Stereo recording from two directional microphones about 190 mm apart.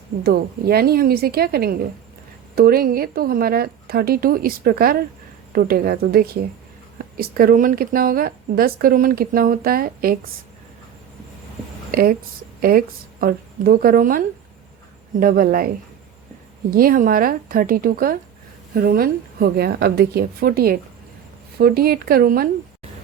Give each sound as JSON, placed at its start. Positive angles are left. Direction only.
{"t": 0.2, "sound": "speech", "side_deg": -55}
{"t": 11.9, "sound": "a sound", "side_deg": -50}
{"t": 12.6, "sound": "speech", "side_deg": -50}
{"t": 16.7, "sound": "speech", "side_deg": -50}